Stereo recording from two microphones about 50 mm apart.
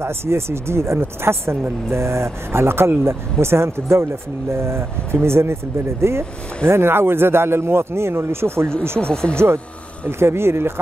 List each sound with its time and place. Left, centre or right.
0.0 s speech: right
9.0 s speech: centre
10.0 s speech: right